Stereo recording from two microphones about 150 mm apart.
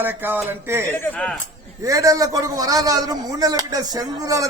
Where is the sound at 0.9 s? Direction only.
10° left (ahead or behind).